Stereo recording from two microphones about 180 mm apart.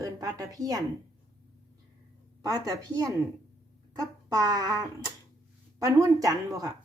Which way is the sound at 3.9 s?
20° right (ahead or behind).